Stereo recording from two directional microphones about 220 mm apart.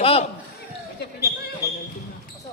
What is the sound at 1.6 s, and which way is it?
Basketball bounce, 15° left (ahead or behind).